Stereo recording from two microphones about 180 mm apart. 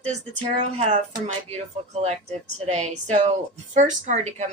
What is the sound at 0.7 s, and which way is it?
A woman's voice, 35° right (ahead or behind).